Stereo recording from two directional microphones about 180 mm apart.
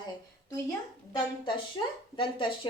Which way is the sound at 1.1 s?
25° left (ahead or behind).